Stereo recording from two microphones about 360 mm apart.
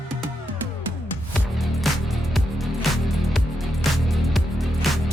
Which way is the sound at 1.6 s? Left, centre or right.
Centre.